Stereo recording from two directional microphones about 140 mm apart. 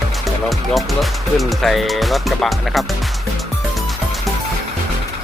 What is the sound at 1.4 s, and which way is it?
Speech, centre (ahead or behind).